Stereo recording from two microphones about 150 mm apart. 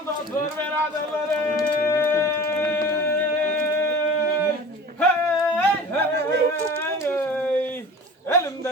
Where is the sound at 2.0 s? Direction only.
15° left (ahead or behind).